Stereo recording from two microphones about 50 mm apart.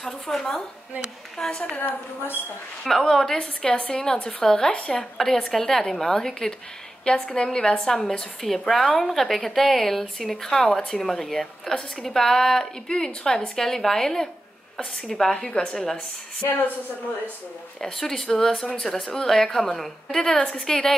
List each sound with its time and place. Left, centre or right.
0.0 s speech: centre
1.9 s a woman's voice: left
2.8 s a woman's voice: centre
3.3 s speech: centre
7.1 s a woman's voice: left
17.7 s a woman's voice: centre
20.3 s a woman's voice: left
20.6 s speech: centre